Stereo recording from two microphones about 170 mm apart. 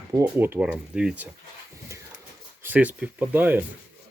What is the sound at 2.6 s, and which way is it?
Speech, 10° right (ahead or behind).